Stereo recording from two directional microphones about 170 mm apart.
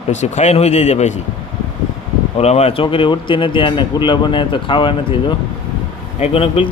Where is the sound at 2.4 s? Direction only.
40° left (ahead or behind).